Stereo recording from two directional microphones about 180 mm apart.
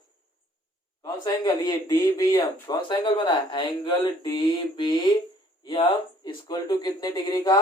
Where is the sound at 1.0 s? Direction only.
20° left (ahead or behind).